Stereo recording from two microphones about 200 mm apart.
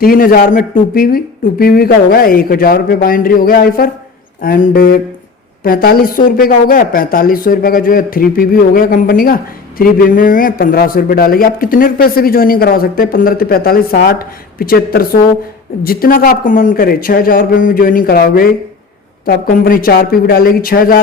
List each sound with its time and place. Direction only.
0.0 s a woman's voice: 45° left (ahead or behind)